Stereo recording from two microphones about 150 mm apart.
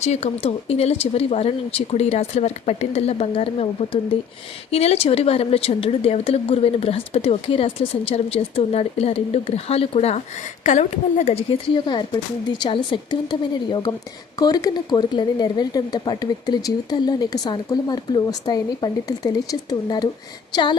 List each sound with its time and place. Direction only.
0.0 s a woman's voice: 45° left (ahead or behind); by 20.7 s 30° left (ahead or behind)